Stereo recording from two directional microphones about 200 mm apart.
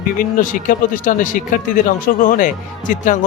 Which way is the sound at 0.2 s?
40° left (ahead or behind).